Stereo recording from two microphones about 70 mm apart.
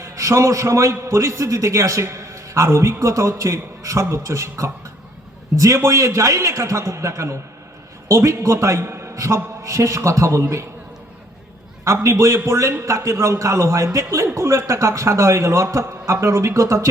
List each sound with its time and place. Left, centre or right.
0.0 s a man's voice: right
11.9 s a man's voice: right